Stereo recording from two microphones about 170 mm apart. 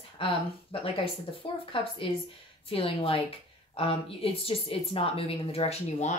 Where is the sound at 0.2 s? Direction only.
30° left (ahead or behind).